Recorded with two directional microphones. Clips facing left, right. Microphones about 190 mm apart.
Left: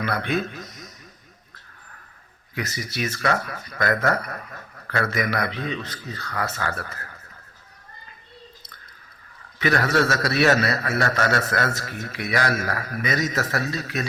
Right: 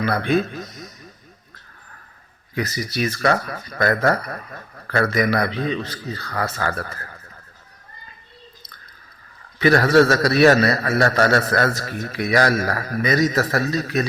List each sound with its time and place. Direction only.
0.0 s a man's voice: 35° right (ahead or behind)
2.6 s a man's voice: 35° right (ahead or behind)
9.6 s a man's voice: 35° right (ahead or behind)